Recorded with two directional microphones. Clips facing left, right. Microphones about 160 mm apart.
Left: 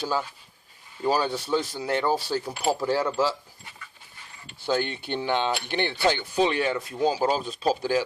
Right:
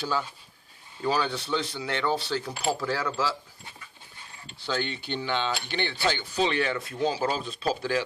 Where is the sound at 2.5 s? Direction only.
15° left (ahead or behind).